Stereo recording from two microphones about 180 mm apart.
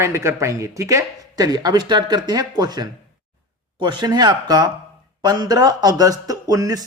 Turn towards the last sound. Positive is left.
turn(degrees=-20)  # may be behind; listen again after turning